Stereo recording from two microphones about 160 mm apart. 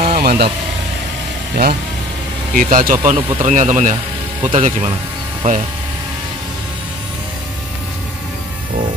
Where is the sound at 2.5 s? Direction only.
60° right (ahead or behind).